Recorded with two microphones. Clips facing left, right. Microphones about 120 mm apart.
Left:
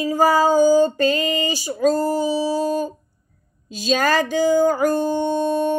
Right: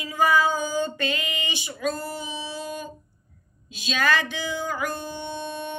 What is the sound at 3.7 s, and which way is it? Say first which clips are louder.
Music: left 6 dB; 40° left (ahead or behind).